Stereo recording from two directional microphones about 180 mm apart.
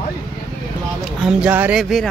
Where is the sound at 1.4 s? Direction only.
5° right (ahead or behind).